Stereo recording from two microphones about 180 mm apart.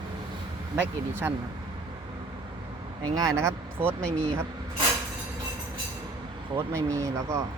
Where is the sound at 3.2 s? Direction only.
20° right (ahead or behind).